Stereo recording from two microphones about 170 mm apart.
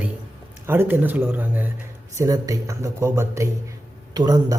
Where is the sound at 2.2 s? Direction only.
20° right (ahead or behind).